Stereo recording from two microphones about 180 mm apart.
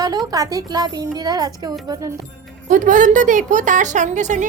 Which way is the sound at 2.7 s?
45° right (ahead or behind).